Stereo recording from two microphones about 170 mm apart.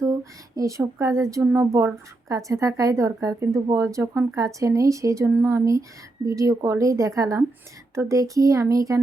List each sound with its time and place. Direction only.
0.0 s speech: 20° right (ahead or behind)